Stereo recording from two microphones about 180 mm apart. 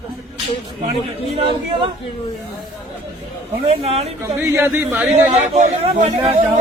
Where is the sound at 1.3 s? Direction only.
30° right (ahead or behind).